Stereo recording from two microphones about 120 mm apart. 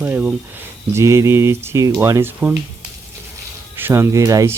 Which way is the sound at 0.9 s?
25° right (ahead or behind).